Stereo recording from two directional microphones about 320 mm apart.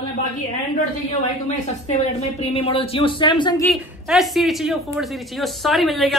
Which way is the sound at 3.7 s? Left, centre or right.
Centre.